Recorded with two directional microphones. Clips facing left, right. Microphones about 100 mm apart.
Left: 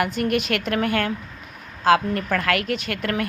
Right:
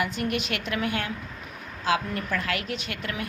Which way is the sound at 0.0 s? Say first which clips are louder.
Left 6 dB; 55° left (ahead or behind).